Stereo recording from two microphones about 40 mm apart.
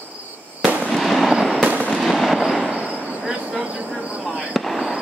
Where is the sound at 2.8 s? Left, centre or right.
Right.